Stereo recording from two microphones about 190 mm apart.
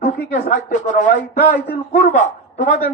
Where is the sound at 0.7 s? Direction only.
40° left (ahead or behind).